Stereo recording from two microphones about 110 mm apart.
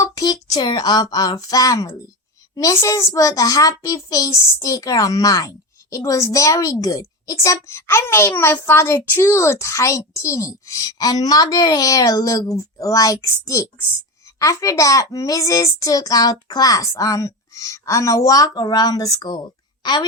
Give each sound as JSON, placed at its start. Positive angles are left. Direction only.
{"t": 0.0, "sound": "a child's voice", "side_deg": 35}